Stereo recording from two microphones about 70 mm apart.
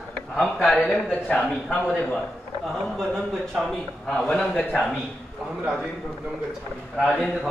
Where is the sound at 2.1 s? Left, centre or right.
Centre.